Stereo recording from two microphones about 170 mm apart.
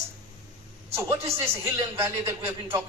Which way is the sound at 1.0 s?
15° right (ahead or behind).